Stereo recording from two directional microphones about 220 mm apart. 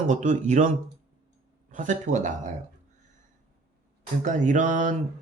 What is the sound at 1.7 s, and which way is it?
Speech, 35° right (ahead or behind).